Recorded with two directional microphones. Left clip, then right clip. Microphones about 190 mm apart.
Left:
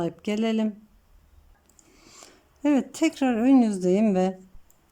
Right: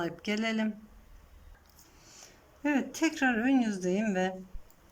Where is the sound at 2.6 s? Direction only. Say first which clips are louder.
Left 6 dB; 20° left (ahead or behind).